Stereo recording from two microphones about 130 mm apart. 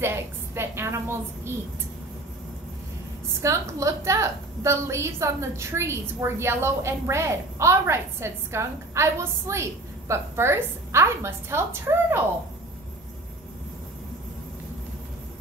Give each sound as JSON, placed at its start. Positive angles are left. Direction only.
{"t": 0.0, "sound": "a woman's voice", "side_deg": -20}
{"t": 3.4, "sound": "a woman's voice", "side_deg": -25}